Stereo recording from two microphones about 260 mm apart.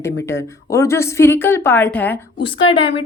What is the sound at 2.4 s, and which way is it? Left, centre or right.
Speech, centre.